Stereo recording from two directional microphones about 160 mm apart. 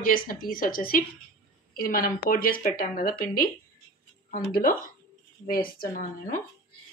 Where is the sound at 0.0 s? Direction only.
60° left (ahead or behind).